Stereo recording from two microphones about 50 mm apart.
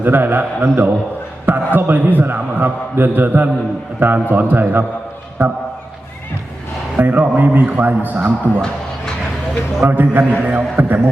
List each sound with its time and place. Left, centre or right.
0.0 s a man's voice: right
6.9 s a man's voice: right
9.9 s a man's voice: right